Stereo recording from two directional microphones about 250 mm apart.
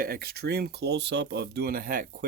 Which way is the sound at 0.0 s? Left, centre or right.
Right.